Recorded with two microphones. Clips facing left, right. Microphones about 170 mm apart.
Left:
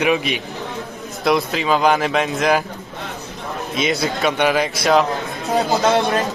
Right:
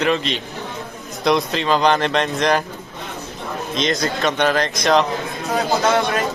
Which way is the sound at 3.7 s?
5° left (ahead or behind).